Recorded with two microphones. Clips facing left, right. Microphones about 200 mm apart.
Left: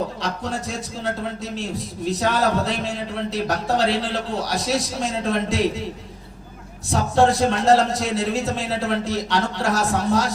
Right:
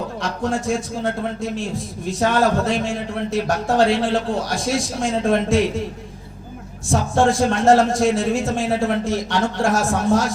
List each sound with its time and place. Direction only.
0.2 s a man's voice: 50° right (ahead or behind)
2.0 s a man's voice: 50° right (ahead or behind)
6.9 s a man's voice: 50° right (ahead or behind)